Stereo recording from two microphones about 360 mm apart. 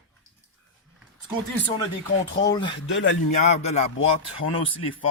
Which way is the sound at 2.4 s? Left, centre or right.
Centre.